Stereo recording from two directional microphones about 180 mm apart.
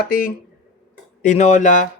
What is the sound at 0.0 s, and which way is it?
Speech, 50° left (ahead or behind).